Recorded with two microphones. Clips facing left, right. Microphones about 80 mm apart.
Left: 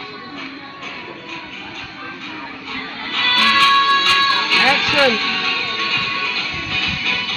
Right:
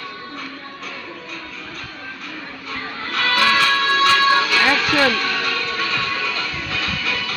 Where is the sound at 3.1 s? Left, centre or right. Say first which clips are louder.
Even; centre.